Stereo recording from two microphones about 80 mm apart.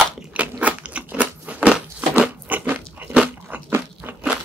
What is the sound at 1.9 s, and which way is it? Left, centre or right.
Crunch, centre.